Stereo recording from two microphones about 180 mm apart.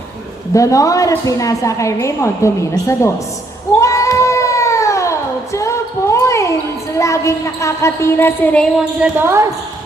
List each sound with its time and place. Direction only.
0.5 s a woman's voice: 20° left (ahead or behind)
3.8 s cat: 15° left (ahead or behind)
5.5 s a sound: 15° left (ahead or behind)
7.0 s a woman's voice: 15° left (ahead or behind)
8.8 s speech: 5° right (ahead or behind)